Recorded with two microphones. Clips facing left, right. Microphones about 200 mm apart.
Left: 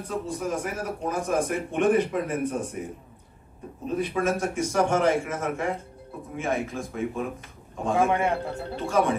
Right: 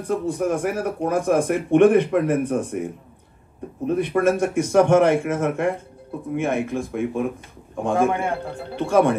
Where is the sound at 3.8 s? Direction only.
60° right (ahead or behind).